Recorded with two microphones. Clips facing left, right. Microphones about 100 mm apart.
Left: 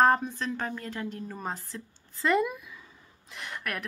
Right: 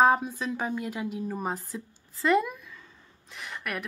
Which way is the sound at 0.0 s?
5° right (ahead or behind).